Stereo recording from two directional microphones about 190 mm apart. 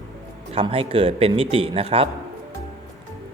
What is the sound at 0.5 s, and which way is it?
Speech, 30° right (ahead or behind).